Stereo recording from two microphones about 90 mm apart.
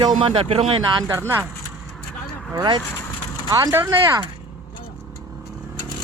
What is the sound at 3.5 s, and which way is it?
Speech, 45° right (ahead or behind).